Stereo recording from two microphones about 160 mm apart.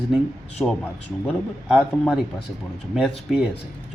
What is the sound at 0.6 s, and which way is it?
Speech, 20° left (ahead or behind).